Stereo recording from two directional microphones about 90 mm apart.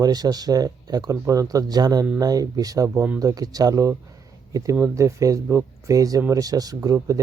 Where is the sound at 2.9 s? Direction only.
25° right (ahead or behind).